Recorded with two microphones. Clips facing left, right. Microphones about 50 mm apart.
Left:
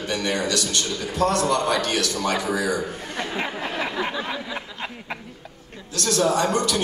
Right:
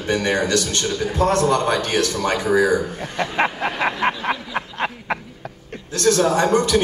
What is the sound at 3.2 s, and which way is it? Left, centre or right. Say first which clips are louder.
Snicker: right 7 dB; right.